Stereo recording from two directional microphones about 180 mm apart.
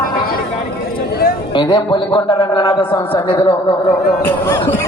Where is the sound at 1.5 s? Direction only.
25° left (ahead or behind).